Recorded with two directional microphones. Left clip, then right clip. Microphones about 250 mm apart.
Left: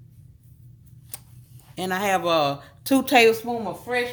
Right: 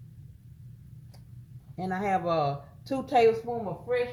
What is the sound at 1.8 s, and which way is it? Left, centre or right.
A woman's voice, left.